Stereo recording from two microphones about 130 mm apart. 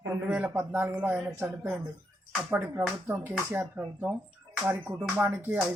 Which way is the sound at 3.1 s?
15° right (ahead or behind).